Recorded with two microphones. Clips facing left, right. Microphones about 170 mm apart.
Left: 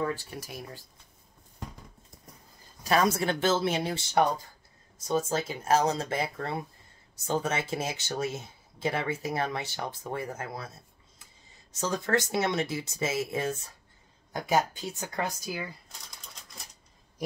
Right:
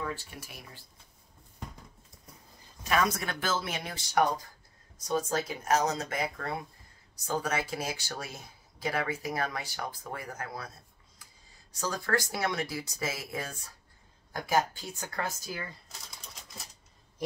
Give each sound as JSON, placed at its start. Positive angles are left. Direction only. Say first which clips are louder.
{"t": 0.4, "sound": "speech", "louder": "left 7 dB", "side_deg": 40}
{"t": 2.8, "sound": "speech", "louder": "left 4 dB", "side_deg": 30}
{"t": 11.7, "sound": "speech", "louder": "left 3 dB", "side_deg": 20}